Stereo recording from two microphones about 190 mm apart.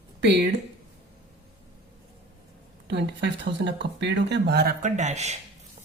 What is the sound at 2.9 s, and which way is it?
Speech, 65° right (ahead or behind).